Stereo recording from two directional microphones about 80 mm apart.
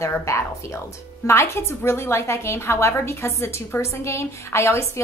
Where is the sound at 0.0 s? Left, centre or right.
Left.